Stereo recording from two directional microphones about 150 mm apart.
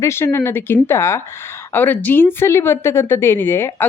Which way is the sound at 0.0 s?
15° left (ahead or behind).